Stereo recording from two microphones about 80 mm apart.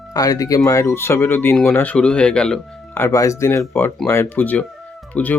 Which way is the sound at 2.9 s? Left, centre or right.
Left.